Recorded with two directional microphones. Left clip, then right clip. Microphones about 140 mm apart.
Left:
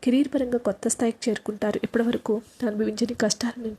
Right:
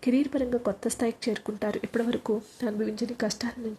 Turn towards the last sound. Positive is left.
turn(degrees=30)  # may be behind; listen again after turning